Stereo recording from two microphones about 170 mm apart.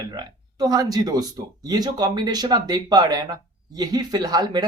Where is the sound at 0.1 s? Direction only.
20° right (ahead or behind).